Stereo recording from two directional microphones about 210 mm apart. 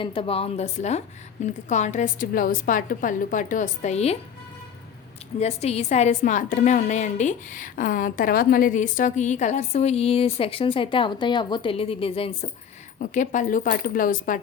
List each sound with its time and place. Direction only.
0.0 s a woman's voice: 25° left (ahead or behind)
5.4 s a woman's voice: 30° left (ahead or behind)
13.0 s a woman's voice: 35° left (ahead or behind)